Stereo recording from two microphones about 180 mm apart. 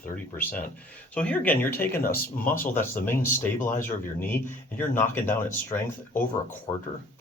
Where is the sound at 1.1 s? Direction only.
5° left (ahead or behind).